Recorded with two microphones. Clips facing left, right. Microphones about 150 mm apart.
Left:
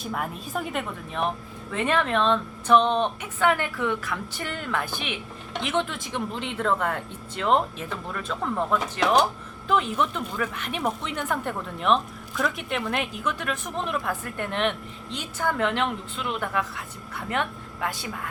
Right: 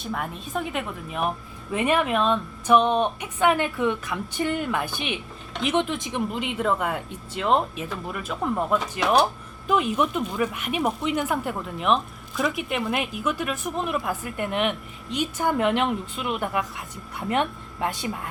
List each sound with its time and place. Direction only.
0.0 s a woman's voice: centre (ahead or behind); by 18.3 s 20° right (ahead or behind)